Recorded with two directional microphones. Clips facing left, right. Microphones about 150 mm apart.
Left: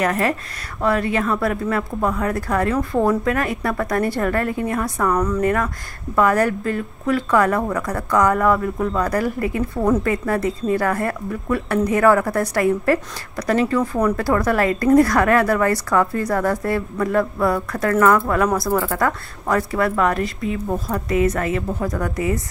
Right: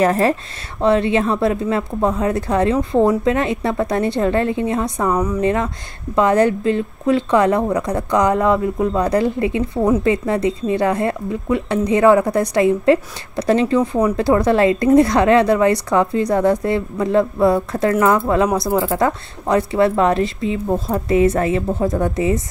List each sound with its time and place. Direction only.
0.0 s a woman's voice: 30° right (ahead or behind)
5.1 s speech: 10° right (ahead or behind)
5.4 s a woman's voice: 25° right (ahead or behind)